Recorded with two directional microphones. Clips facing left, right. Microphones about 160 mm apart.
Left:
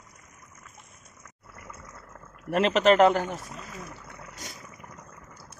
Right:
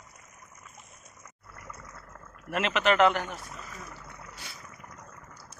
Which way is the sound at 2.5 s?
35° left (ahead or behind).